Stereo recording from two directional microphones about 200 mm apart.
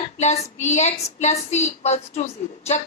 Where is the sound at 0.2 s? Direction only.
35° left (ahead or behind).